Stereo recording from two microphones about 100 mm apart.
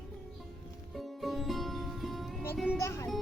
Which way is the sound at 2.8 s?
30° left (ahead or behind).